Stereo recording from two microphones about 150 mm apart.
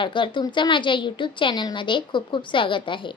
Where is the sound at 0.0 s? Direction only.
35° left (ahead or behind).